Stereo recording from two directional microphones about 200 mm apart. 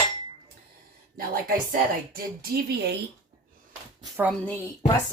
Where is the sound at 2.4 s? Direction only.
55° right (ahead or behind).